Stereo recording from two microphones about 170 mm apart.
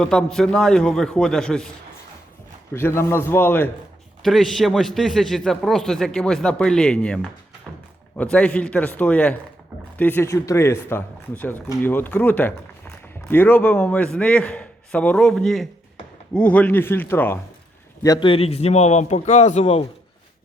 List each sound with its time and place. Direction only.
0.0 s a man's voice: 5° left (ahead or behind)
2.7 s a man's voice: 15° left (ahead or behind)
4.2 s a man's voice: centre (ahead or behind)
18.0 s speech: 25° left (ahead or behind)